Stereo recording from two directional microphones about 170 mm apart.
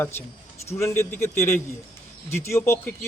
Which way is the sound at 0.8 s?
15° left (ahead or behind).